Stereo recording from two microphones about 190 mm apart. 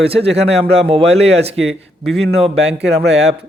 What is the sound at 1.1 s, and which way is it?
Speech, 35° right (ahead or behind).